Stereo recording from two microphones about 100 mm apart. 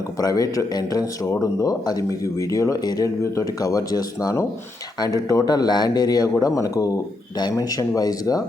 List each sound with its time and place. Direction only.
0.2 s speech: 40° left (ahead or behind)